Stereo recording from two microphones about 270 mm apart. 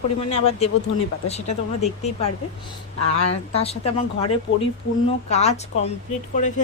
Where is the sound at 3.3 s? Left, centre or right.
Left.